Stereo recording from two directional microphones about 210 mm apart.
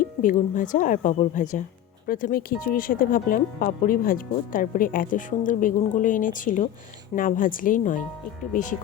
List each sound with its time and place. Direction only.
0.0 s speech: 40° left (ahead or behind)